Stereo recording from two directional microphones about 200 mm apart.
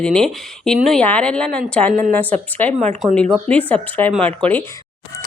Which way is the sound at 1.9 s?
40° right (ahead or behind).